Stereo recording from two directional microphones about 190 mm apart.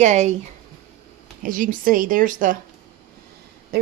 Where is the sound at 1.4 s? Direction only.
45° right (ahead or behind).